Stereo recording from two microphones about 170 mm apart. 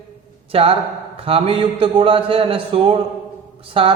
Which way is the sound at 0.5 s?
35° right (ahead or behind).